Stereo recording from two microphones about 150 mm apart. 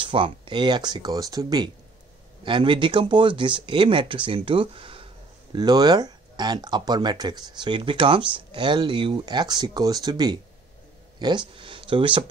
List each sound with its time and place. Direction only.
0.0 s speech: 35° right (ahead or behind)